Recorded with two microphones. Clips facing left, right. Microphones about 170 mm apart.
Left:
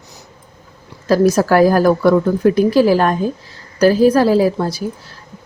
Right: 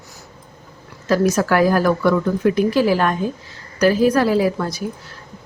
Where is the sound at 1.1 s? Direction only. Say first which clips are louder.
Left 4 dB; 35° left (ahead or behind).